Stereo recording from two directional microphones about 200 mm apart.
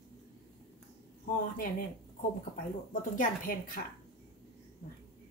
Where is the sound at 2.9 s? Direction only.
45° left (ahead or behind).